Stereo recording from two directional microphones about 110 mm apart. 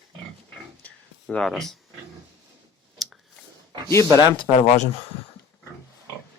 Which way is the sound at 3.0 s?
Centre (ahead or behind).